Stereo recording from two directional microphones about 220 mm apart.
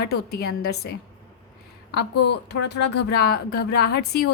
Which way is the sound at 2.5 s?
50° left (ahead or behind).